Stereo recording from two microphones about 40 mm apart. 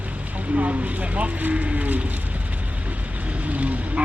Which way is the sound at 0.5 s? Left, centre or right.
Right.